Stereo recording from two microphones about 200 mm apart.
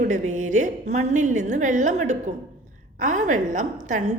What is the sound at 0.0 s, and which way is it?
A woman's voice, 40° right (ahead or behind).